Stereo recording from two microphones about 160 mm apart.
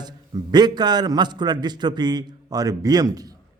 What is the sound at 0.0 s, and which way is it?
A man's voice, 25° right (ahead or behind).